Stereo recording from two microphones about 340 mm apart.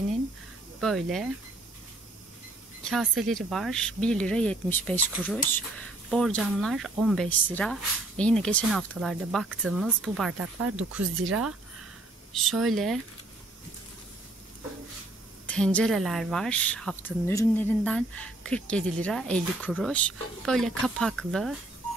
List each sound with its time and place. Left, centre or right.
0.7 s speech: centre
2.9 s speech: centre
11.1 s speech: right
12.4 s speech: centre
15.4 s speech: centre